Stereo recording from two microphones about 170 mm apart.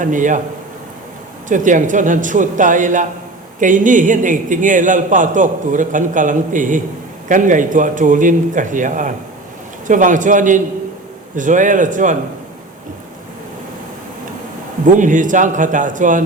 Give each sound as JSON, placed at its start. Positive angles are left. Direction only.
{"t": 0.0, "sound": "a man's voice", "side_deg": -50}
{"t": 1.5, "sound": "a man's voice", "side_deg": -50}
{"t": 14.8, "sound": "a man's voice", "side_deg": -50}